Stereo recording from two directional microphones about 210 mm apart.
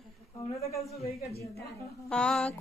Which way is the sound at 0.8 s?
30° left (ahead or behind).